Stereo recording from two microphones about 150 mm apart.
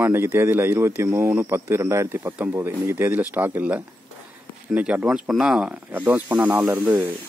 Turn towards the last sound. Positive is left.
turn(degrees=-10)  # may be behind; listen again after turning